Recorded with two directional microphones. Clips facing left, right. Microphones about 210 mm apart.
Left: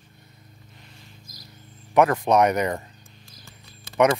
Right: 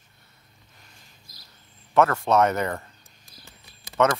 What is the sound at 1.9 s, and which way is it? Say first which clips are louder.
Speech: left 2 dB; 15° left (ahead or behind).